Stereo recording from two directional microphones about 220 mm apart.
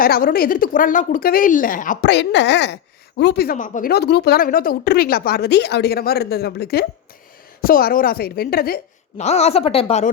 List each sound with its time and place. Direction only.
0.0 s speech: 40° left (ahead or behind)
2.0 s speech: 50° left (ahead or behind)
9.1 s speech: 30° left (ahead or behind)